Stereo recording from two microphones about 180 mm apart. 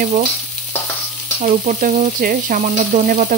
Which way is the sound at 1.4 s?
45° right (ahead or behind).